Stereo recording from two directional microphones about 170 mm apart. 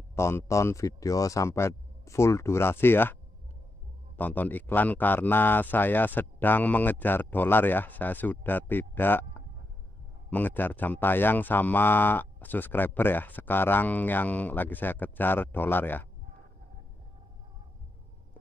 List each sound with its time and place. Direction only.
0.1 s speech: 15° left (ahead or behind)
4.2 s speech: 10° left (ahead or behind)
10.3 s speech: 10° left (ahead or behind)